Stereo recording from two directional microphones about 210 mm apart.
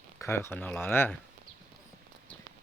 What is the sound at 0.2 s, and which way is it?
Speech, 10° left (ahead or behind).